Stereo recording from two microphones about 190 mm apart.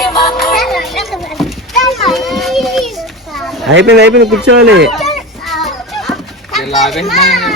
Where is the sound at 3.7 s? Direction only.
70° right (ahead or behind).